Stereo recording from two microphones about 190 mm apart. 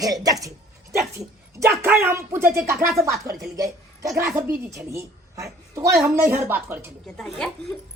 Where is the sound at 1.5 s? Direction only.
15° right (ahead or behind).